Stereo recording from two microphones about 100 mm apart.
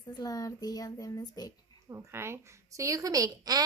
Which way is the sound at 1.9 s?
25° right (ahead or behind).